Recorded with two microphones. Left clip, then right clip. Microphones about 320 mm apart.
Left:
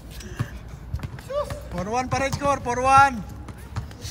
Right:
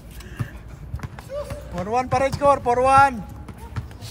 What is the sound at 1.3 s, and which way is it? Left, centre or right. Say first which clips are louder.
Music: left 4 dB; centre.